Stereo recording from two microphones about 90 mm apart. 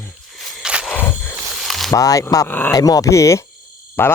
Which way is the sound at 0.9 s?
20° left (ahead or behind).